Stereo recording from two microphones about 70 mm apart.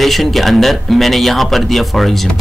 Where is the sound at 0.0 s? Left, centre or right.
Centre.